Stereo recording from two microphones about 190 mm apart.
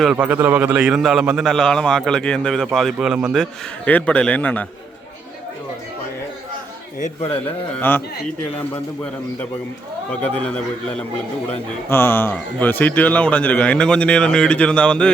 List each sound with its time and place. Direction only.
0.0 s a man's voice: 5° right (ahead or behind)
7.0 s a man's voice: 35° left (ahead or behind)
7.4 s speech: 10° left (ahead or behind)
10.1 s speech: 5° left (ahead or behind)